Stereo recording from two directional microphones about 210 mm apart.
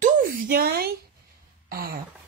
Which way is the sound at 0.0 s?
45° right (ahead or behind).